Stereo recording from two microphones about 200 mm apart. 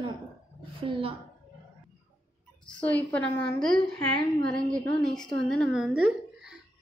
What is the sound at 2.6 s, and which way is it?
A woman's voice, 5° left (ahead or behind).